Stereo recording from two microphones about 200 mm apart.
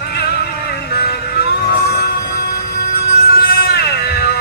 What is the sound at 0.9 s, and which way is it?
Vehicle, 50° left (ahead or behind).